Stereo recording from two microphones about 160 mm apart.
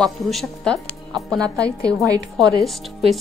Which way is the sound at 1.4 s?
20° right (ahead or behind).